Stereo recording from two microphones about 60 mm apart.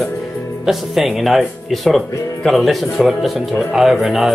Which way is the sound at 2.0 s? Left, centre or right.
Left.